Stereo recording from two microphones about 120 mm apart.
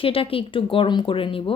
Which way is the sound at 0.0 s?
50° left (ahead or behind).